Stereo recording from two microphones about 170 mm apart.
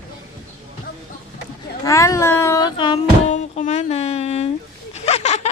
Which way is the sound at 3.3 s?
45° left (ahead or behind).